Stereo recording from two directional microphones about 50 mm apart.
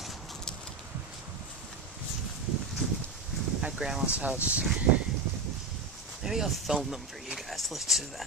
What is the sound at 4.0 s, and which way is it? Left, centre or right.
Speech, right.